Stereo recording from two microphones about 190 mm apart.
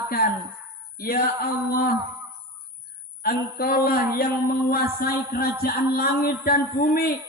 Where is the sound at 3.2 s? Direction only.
50° left (ahead or behind).